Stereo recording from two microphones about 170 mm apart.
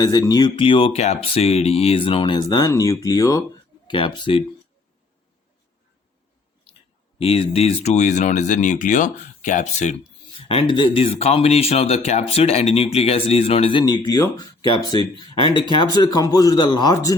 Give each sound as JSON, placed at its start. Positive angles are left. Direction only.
{"t": 0.0, "sound": "speech", "side_deg": 20}
{"t": 7.2, "sound": "speech", "side_deg": 35}
{"t": 10.5, "sound": "speech", "side_deg": 30}
{"t": 15.5, "sound": "speech", "side_deg": 25}